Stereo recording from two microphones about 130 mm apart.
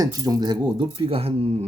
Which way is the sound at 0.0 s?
30° right (ahead or behind).